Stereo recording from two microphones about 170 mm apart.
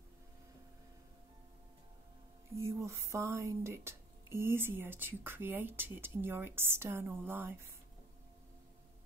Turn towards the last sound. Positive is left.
turn(degrees=-15)  # may be behind; listen again after turning